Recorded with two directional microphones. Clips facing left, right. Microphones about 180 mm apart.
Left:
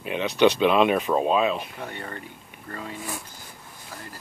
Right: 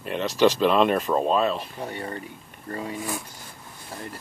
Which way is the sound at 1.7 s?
30° right (ahead or behind).